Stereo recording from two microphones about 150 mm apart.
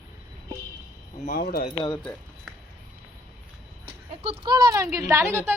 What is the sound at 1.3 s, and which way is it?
Speech, 80° left.